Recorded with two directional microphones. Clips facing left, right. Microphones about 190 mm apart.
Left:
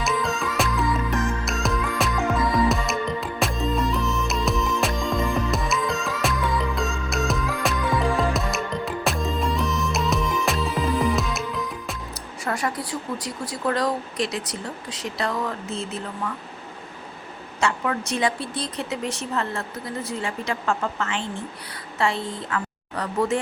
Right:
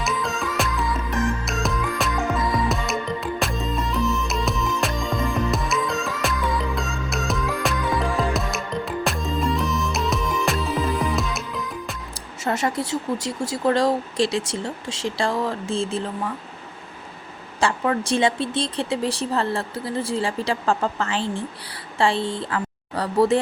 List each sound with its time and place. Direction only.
0.0 s music: centre (ahead or behind)
12.5 s speech: 25° right (ahead or behind)
17.6 s a woman's voice: 30° right (ahead or behind)